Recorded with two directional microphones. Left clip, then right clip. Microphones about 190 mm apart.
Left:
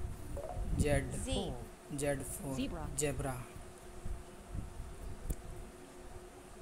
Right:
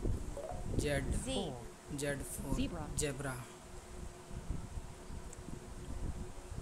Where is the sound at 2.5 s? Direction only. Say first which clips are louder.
Right 1 dB; centre (ahead or behind).